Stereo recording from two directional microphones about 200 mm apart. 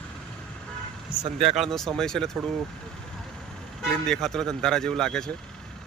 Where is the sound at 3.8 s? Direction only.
Centre (ahead or behind).